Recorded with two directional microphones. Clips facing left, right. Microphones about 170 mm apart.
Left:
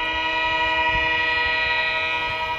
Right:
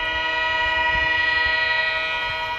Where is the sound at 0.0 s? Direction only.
15° left (ahead or behind).